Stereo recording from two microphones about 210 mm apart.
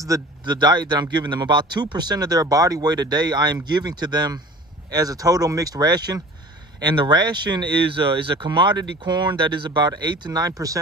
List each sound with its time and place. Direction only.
0.0 s speech: 20° right (ahead or behind)